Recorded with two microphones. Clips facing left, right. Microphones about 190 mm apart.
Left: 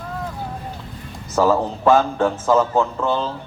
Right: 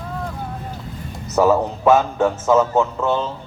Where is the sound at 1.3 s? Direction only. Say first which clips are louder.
Right 2 dB; 5° right (ahead or behind).